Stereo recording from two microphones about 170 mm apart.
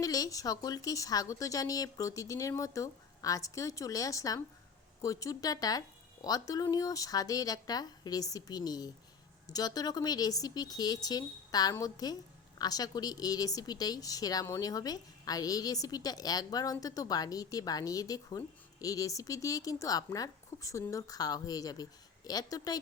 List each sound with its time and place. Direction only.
0.0 s a woman's voice: 20° left (ahead or behind)